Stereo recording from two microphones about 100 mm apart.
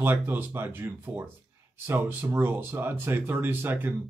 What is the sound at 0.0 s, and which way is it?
Speech, 20° right (ahead or behind).